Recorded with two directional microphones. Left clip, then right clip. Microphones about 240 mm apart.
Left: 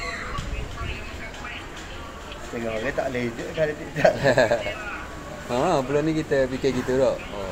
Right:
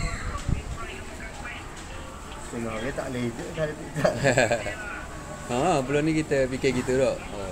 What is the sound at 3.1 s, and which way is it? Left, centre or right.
Speech, right.